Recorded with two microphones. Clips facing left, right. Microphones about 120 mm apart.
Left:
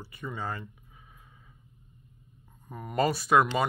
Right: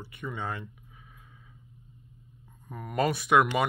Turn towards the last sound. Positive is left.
turn(degrees=5)  # may be behind; listen again after turning